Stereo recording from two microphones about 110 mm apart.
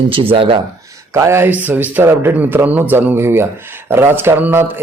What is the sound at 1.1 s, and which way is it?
Speech, 25° right (ahead or behind).